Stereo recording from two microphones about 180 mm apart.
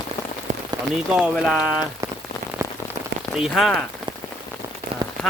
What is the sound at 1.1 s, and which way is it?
Speech, 5° right (ahead or behind).